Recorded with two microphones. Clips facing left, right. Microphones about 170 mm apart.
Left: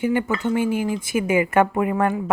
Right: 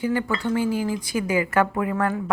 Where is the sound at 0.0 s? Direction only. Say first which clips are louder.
Left 3 dB; 20° left (ahead or behind).